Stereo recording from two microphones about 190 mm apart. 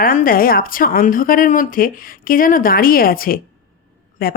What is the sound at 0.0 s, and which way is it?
Speech, 50° left (ahead or behind).